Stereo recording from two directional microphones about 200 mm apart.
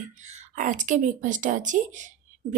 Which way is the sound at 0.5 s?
40° right (ahead or behind).